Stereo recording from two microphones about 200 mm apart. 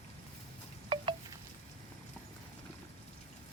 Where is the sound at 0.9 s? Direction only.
25° right (ahead or behind).